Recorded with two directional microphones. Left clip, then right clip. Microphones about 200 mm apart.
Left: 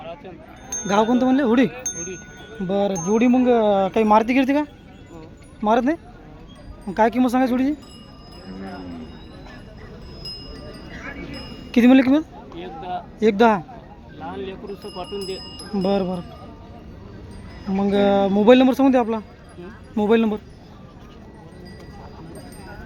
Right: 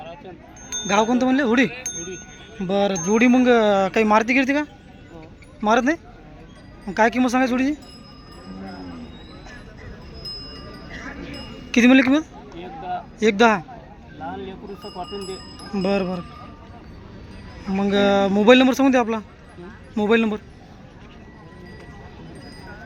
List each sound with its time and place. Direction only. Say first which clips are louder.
0.9 s a man's voice: left 1 dB; 15° left (ahead or behind)
2.6 s speech: right 1 dB; 5° left (ahead or behind)
5.6 s a man's voice: even; 5° left (ahead or behind)
11.7 s a man's voice: even; 10° left (ahead or behind)
12.5 s a sound: even; 15° right (ahead or behind)
13.1 s a man's voice: even; 10° left (ahead or behind)
14.2 s a sound: even; 25° right (ahead or behind)
15.7 s a man's voice: left 1 dB; 10° left (ahead or behind)
17.7 s a man's voice: even; 5° left (ahead or behind)